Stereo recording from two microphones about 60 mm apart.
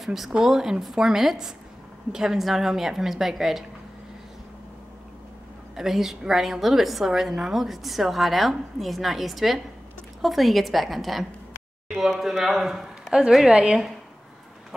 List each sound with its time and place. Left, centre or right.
0.0 s a woman's voice: centre
5.8 s a woman's voice: centre
13.5 s speech: centre